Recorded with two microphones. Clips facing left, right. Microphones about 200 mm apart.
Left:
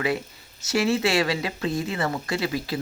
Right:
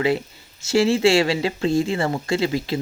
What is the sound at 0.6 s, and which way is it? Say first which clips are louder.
Speech: right 6 dB; 25° right (ahead or behind).